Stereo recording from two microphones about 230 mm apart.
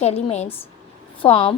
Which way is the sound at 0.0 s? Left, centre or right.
Left.